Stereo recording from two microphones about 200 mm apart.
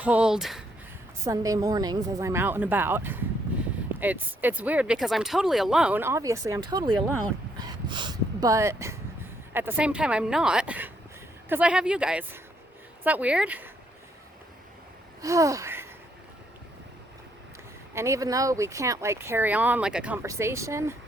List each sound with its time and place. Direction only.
0.0 s speech: 5° right (ahead or behind)
1.2 s a woman's voice: 15° right (ahead or behind)
15.2 s a sound: 15° right (ahead or behind)
17.9 s speech: 15° right (ahead or behind)